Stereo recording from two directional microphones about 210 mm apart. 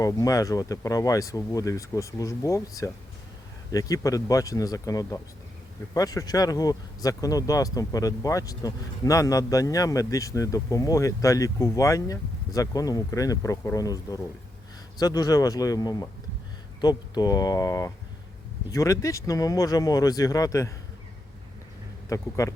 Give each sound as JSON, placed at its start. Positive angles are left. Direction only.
{"t": 0.0, "sound": "speech", "side_deg": 15}
{"t": 22.1, "sound": "speech", "side_deg": 15}